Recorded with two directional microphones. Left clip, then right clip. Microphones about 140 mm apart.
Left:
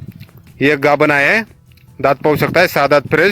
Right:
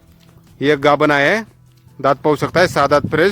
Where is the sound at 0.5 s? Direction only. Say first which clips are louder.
Left 1 dB; 20° left (ahead or behind).